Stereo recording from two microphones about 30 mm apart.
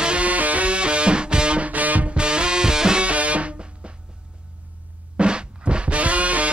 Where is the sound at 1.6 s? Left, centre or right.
Right.